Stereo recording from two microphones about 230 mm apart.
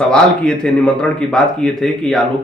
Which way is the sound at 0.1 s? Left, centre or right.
Centre.